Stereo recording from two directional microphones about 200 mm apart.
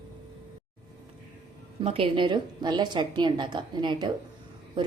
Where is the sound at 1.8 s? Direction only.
25° right (ahead or behind).